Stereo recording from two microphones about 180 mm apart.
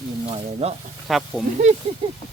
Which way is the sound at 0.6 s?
35° right (ahead or behind).